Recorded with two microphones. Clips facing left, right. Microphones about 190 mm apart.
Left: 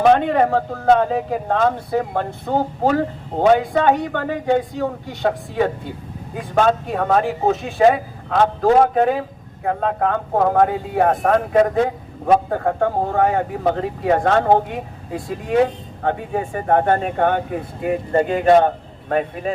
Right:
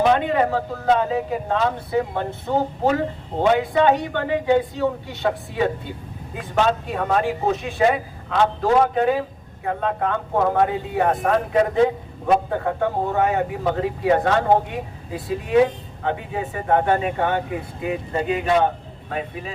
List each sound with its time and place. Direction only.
0.0 s speech: 50° left (ahead or behind)
6.5 s speech: 45° left (ahead or behind)
16.0 s speech: 45° left (ahead or behind)